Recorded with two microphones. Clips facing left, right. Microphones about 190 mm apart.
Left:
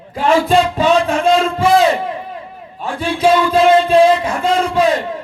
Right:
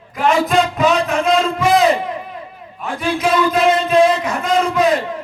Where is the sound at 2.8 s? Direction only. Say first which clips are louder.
Left 4 dB; 30° left (ahead or behind).